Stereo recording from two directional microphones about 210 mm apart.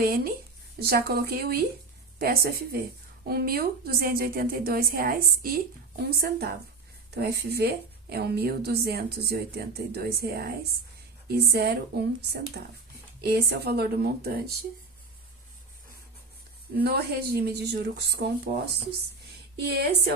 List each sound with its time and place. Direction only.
0.8 s a woman's voice: 45° right (ahead or behind)
16.7 s speech: 45° right (ahead or behind)